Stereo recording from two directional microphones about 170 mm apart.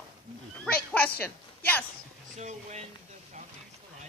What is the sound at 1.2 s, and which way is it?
Speech, 10° left (ahead or behind).